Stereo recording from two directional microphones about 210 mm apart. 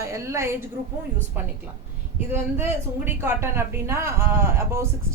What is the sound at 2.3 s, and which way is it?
A woman's voice, 10° right (ahead or behind).